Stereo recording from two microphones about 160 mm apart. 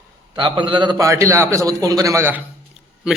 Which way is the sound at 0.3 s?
30° right (ahead or behind).